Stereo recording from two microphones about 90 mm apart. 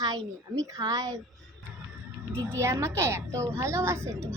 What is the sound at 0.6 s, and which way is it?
Speech, 40° right (ahead or behind).